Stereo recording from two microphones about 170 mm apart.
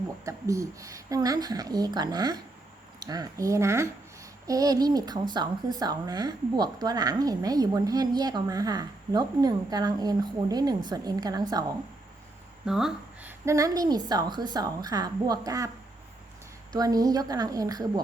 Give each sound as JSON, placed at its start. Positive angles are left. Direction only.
{"t": 0.3, "sound": "speech", "side_deg": -20}
{"t": 12.6, "sound": "speech", "side_deg": -5}
{"t": 13.4, "sound": "speech", "side_deg": -15}
{"t": 16.7, "sound": "speech", "side_deg": -20}